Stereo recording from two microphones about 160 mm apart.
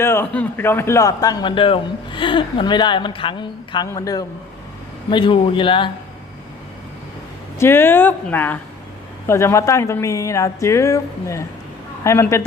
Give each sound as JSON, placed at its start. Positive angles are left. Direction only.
{"t": 0.0, "sound": "a man's voice", "side_deg": 15}
{"t": 7.6, "sound": "a man's voice", "side_deg": 15}